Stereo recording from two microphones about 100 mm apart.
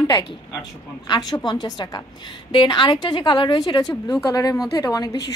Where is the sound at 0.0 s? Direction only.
40° left (ahead or behind).